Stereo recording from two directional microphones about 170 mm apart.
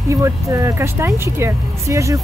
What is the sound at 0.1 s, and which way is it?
Speech, 15° right (ahead or behind).